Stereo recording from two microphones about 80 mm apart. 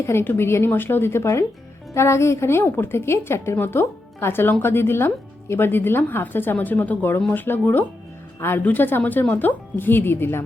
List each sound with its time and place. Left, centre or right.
0.0 s a woman's voice: left